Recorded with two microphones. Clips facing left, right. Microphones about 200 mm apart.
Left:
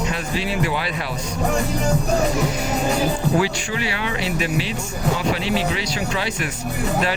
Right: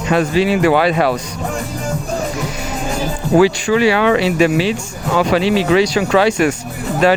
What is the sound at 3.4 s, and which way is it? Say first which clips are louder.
Speech: right 11 dB; 90° right.